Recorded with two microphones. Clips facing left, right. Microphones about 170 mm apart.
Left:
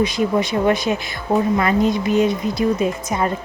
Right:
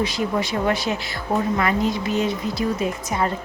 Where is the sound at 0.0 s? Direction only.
20° left (ahead or behind).